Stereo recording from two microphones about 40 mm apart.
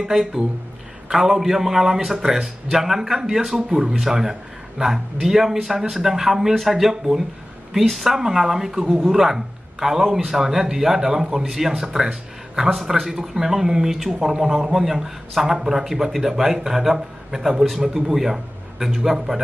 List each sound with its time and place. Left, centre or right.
0.1 s a man's voice: centre